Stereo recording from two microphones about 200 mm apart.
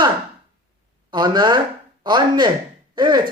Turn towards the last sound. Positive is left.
turn(degrees=-20)  # may be behind; listen again after turning